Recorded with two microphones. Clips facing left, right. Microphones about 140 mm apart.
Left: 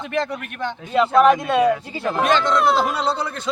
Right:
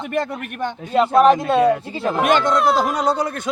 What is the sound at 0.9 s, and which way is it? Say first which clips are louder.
Speech: right 1 dB; 35° right (ahead or behind).